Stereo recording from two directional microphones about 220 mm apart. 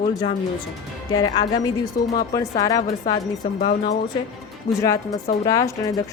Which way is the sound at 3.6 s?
30° left (ahead or behind).